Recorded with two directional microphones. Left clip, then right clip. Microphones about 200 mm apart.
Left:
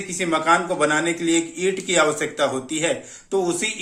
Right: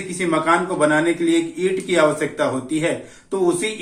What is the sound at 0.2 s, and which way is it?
A man's voice, 50° left (ahead or behind).